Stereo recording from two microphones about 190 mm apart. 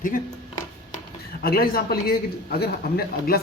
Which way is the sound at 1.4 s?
50° left (ahead or behind).